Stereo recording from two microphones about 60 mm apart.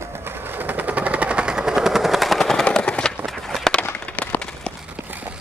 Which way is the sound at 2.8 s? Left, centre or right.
Centre.